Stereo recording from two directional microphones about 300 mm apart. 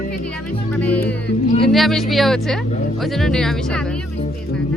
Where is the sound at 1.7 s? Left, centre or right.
Centre.